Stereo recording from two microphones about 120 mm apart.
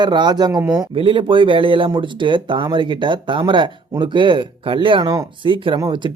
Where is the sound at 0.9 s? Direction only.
45° right (ahead or behind).